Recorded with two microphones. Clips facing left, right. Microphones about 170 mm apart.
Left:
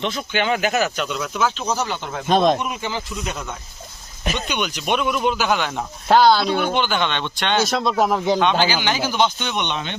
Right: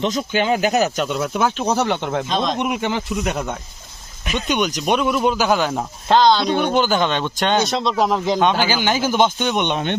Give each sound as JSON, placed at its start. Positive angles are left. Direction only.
{"t": 0.0, "sound": "speech", "side_deg": -40}
{"t": 1.7, "sound": "speech", "side_deg": -60}
{"t": 2.2, "sound": "speech", "side_deg": 55}
{"t": 2.6, "sound": "speech", "side_deg": -65}
{"t": 4.4, "sound": "speech", "side_deg": -45}
{"t": 4.9, "sound": "speech", "side_deg": 0}
{"t": 5.4, "sound": "speech", "side_deg": -40}
{"t": 6.1, "sound": "speech", "side_deg": 10}
{"t": 6.7, "sound": "speech", "side_deg": -40}
{"t": 7.9, "sound": "speech", "side_deg": 5}
{"t": 8.7, "sound": "speech", "side_deg": -45}